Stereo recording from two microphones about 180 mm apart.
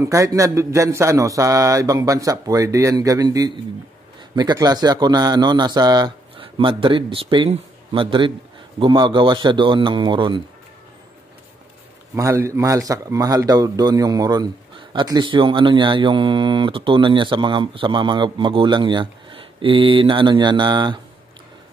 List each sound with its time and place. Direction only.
0.0 s speech: 15° right (ahead or behind)
12.2 s speech: 15° right (ahead or behind)